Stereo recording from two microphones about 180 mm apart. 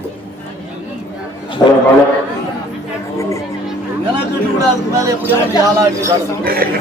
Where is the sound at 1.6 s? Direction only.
20° left (ahead or behind).